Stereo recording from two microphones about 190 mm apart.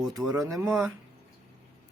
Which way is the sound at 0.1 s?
20° right (ahead or behind).